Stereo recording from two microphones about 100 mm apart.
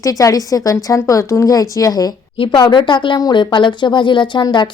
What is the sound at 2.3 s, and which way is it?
Speech, 55° left (ahead or behind).